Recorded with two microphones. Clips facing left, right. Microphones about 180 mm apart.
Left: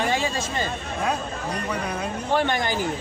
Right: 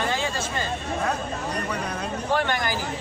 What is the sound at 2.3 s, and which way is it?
Speech, 25° left (ahead or behind).